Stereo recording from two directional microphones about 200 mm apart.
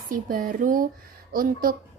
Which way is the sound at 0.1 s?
45° right (ahead or behind).